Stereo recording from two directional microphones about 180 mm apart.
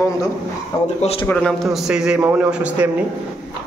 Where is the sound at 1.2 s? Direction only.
5° left (ahead or behind).